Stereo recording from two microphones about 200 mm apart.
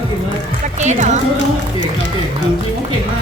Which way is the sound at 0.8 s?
35° right (ahead or behind).